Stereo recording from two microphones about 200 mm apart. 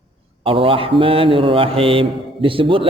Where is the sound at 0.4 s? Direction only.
25° right (ahead or behind).